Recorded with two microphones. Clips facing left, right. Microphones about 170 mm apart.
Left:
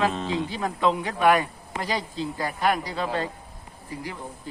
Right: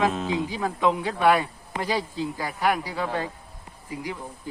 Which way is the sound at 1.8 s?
10° right (ahead or behind).